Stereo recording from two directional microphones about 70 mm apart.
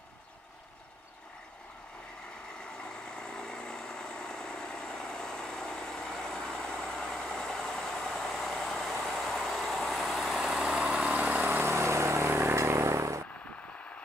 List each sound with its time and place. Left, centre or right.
2.8 s vehicle: centre
11.5 s vehicle: right